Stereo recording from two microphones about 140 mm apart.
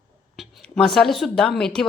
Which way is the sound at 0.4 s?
Centre (ahead or behind).